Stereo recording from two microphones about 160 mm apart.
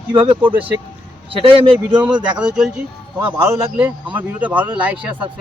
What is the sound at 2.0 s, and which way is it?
Speech, 5° right (ahead or behind).